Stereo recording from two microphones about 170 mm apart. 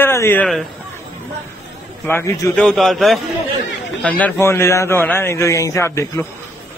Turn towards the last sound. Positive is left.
turn(degrees=15)  # may be behind; listen again after turning